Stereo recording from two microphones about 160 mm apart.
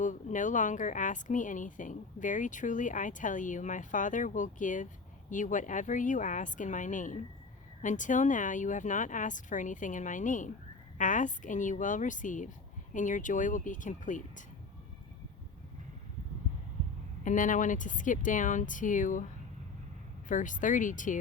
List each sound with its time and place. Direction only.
0.0 s speech: 50° left (ahead or behind)
17.2 s speech: 55° left (ahead or behind)
20.2 s speech: 55° left (ahead or behind)